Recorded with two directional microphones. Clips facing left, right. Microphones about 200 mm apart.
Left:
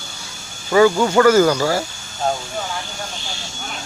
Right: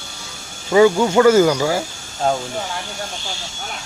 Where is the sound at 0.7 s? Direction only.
15° right (ahead or behind).